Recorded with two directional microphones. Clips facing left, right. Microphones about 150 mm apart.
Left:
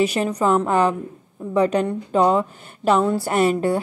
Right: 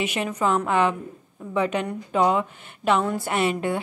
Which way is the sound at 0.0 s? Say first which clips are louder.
Left 5 dB; 35° left (ahead or behind).